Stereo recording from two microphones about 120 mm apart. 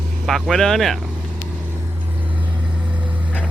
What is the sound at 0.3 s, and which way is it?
Speech, centre (ahead or behind).